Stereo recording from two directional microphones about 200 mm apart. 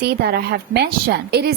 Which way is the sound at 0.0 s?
50° right (ahead or behind).